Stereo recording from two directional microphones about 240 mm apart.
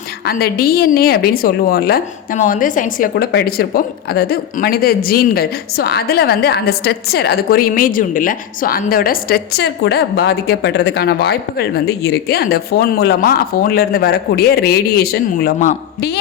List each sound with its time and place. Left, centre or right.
0.3 s a woman's voice: left